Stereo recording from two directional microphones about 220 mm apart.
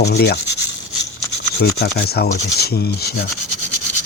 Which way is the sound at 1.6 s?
45° left (ahead or behind).